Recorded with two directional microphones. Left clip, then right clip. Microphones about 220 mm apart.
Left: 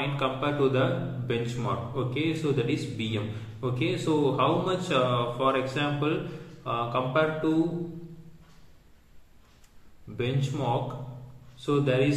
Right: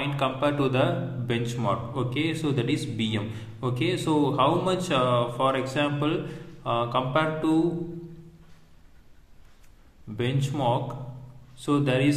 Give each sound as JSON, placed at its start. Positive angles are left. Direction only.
{"t": 0.0, "sound": "a man's voice", "side_deg": -40}
{"t": 10.1, "sound": "a man's voice", "side_deg": -40}